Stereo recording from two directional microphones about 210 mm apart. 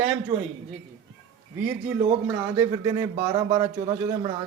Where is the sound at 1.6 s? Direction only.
10° right (ahead or behind).